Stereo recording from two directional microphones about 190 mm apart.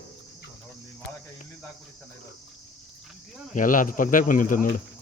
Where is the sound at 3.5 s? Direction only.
45° left (ahead or behind).